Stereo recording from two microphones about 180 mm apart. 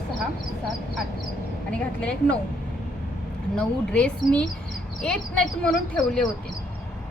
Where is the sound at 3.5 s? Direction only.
5° left (ahead or behind).